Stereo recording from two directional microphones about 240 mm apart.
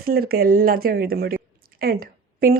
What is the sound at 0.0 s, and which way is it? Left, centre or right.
A woman's voice, right.